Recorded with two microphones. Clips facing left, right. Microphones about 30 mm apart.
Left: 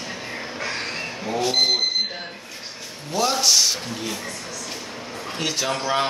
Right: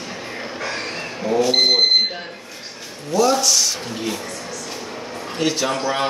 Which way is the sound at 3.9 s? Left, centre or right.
Centre.